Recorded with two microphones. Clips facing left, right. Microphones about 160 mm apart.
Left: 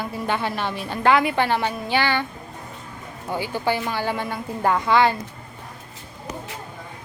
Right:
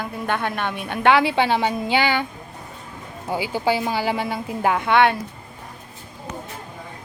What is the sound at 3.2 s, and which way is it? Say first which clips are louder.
A woman's voice: right 2 dB; 10° right (ahead or behind).